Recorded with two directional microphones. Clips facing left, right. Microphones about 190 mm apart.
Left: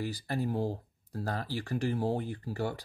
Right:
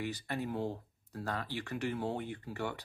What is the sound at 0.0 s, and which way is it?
Speech, 35° left (ahead or behind).